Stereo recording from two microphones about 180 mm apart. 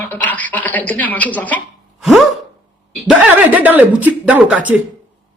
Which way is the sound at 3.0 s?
5° right (ahead or behind).